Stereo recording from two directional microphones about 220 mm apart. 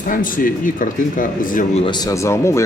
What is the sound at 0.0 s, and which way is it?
Speech, 40° left (ahead or behind).